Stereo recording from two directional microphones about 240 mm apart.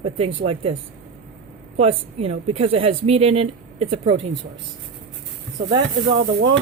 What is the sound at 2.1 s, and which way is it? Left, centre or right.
A woman's voice, right.